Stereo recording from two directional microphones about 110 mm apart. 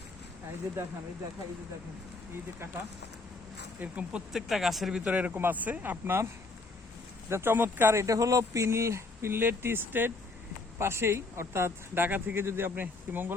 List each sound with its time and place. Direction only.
3.8 s speech: 10° right (ahead or behind)
7.3 s speech: 20° right (ahead or behind)